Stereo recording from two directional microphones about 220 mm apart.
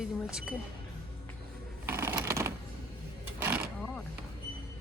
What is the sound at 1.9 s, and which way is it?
Typewriter, 10° right (ahead or behind).